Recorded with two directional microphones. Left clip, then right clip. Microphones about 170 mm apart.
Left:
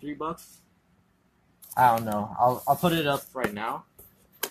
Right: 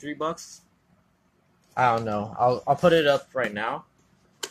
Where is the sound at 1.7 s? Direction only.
15° right (ahead or behind).